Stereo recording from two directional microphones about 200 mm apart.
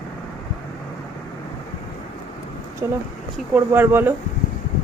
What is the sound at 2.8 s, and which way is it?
Speech, 15° right (ahead or behind).